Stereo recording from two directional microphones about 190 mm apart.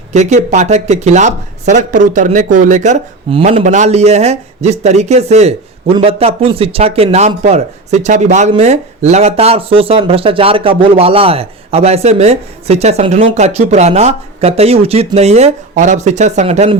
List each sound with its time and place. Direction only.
0.1 s speech: 35° right (ahead or behind)